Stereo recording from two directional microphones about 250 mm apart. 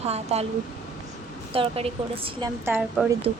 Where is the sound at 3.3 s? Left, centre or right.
Right.